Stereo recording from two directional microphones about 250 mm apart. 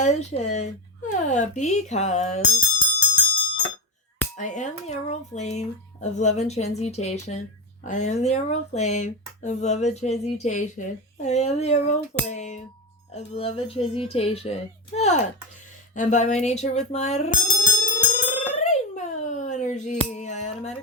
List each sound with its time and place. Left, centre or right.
0.0 s speech: left
4.4 s speech: left
16.0 s a sound: left